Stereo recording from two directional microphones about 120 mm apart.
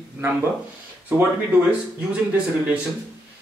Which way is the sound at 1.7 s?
10° right (ahead or behind).